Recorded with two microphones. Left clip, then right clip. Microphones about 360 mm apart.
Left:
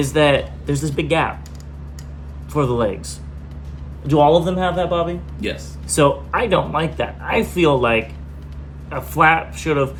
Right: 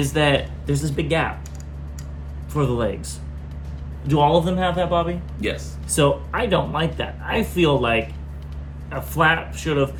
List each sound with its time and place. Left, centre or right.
0.1 s speech: centre
2.5 s speech: centre
4.0 s speech: centre